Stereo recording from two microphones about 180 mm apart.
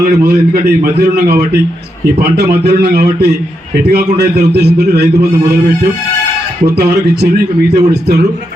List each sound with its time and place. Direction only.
0.0 s a man's voice: 55° right (ahead or behind)
7.8 s a man's voice: 65° right (ahead or behind)